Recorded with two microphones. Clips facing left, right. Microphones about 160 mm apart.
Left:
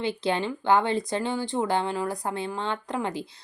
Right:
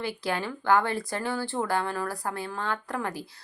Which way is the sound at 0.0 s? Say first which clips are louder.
Left 4 dB; 20° left (ahead or behind).